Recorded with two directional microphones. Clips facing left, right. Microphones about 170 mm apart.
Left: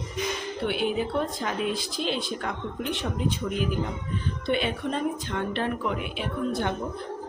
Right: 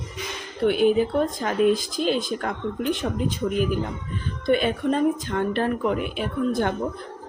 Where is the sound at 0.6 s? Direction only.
40° right (ahead or behind).